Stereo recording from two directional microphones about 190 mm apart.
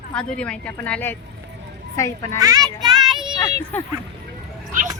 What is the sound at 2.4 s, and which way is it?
Speech, 20° right (ahead or behind).